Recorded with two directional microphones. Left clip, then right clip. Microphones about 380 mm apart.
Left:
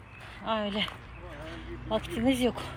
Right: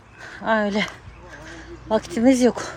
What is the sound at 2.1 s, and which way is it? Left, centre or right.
Speech, right.